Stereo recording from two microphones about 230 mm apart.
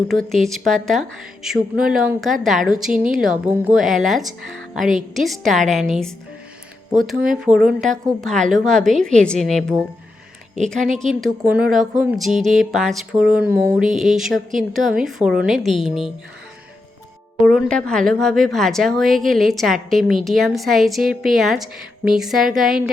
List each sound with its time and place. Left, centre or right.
0.1 s speech: centre
7.4 s speech: centre
10.8 s a woman's voice: right
11.0 s speech: centre
17.4 s speech: centre